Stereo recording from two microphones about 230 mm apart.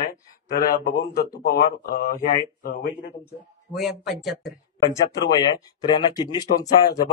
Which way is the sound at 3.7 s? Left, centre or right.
Centre.